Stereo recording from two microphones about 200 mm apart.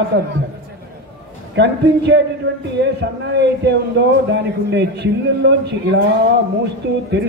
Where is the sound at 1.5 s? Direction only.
60° right (ahead or behind).